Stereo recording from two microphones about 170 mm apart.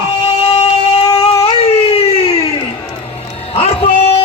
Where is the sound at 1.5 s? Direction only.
35° left (ahead or behind).